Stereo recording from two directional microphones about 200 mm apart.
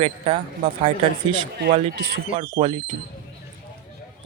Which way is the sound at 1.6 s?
55° right (ahead or behind).